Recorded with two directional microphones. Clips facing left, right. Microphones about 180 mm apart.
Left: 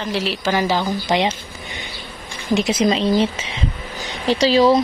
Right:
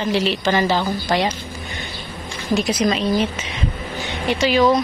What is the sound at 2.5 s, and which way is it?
A woman's voice, 25° left (ahead or behind).